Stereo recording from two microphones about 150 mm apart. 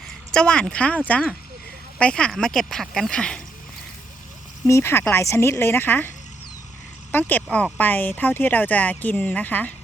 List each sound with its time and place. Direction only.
0.3 s speech: 5° left (ahead or behind)
4.6 s speech: 15° left (ahead or behind)